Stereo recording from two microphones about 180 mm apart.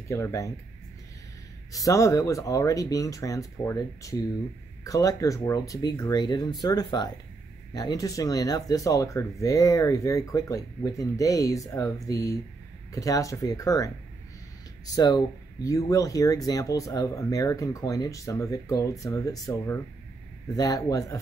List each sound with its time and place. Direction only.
0.1 s speech: 15° left (ahead or behind)
1.7 s speech: 20° left (ahead or behind)